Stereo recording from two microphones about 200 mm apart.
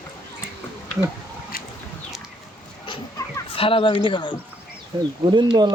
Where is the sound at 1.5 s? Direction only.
45° left (ahead or behind).